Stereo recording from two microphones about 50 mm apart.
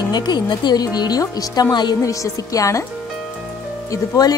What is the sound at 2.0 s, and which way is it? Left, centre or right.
Speech, left.